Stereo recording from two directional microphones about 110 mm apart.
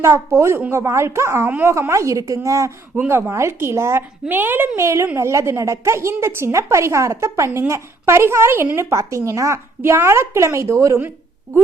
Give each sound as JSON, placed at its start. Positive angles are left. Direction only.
{"t": 0.0, "sound": "a woman's voice", "side_deg": -25}